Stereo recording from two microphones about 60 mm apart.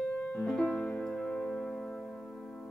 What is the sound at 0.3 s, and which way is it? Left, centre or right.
Music, centre.